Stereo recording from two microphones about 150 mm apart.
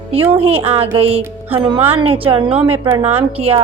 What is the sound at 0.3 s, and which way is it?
Music, 40° right (ahead or behind).